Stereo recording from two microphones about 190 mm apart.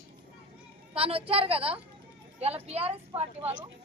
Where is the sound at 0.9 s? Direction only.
30° right (ahead or behind).